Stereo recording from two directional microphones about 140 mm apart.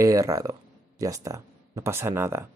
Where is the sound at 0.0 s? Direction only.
20° right (ahead or behind).